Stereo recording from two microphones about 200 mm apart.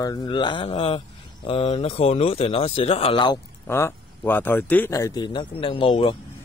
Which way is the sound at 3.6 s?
10° left (ahead or behind).